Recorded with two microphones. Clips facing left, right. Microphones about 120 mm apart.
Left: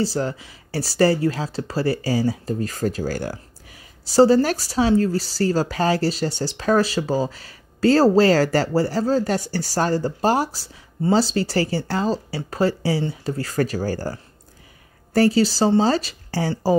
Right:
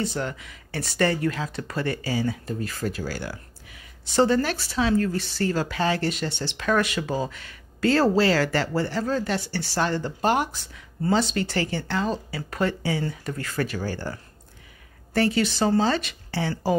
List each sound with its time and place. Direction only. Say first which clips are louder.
0.0 s speech: left 5 dB; 35° left (ahead or behind)
15.1 s speech: left 5 dB; 35° left (ahead or behind)